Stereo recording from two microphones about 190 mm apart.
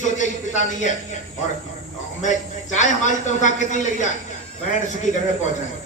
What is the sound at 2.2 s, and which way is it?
A man's voice, 40° left (ahead or behind).